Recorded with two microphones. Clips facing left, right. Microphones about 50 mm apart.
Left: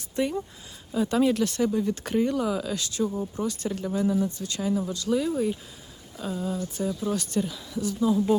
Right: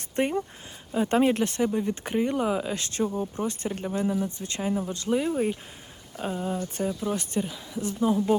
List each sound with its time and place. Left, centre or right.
0.2 s speech: right
8.0 s speech: right